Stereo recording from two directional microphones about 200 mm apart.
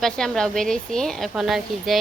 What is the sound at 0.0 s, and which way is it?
Speech, 5° left (ahead or behind).